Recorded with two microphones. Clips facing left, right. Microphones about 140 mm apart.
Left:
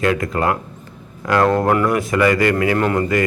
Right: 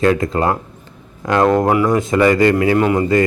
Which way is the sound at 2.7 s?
15° right (ahead or behind).